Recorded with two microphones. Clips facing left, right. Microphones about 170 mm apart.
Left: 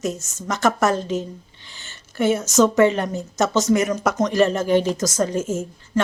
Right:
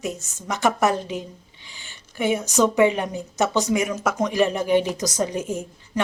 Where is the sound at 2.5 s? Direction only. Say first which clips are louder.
Left 2 dB; 15° right (ahead or behind).